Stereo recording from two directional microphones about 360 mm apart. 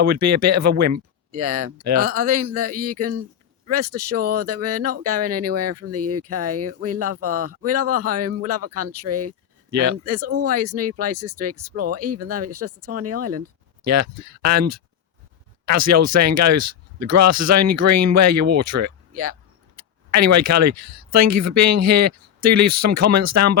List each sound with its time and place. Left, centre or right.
0.0 s speech: right
10.2 s speech: right
10.4 s speech: right